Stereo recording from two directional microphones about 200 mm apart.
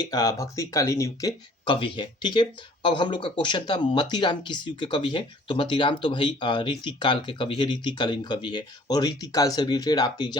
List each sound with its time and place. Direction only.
0.1 s speech: 15° left (ahead or behind)